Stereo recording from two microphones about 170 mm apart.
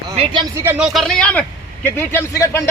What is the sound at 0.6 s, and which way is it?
Speech, 15° right (ahead or behind).